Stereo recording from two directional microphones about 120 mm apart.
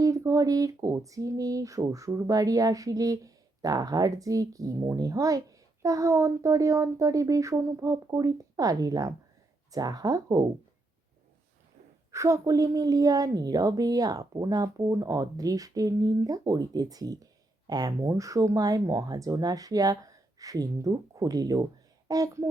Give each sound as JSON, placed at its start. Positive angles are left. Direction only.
{"t": 0.0, "sound": "a woman's voice", "side_deg": -25}
{"t": 12.1, "sound": "a woman's voice", "side_deg": -25}